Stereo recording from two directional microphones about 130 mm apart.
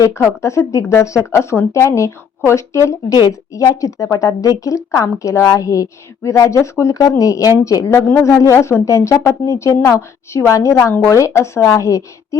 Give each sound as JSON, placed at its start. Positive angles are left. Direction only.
{"t": 0.0, "sound": "speech", "side_deg": 20}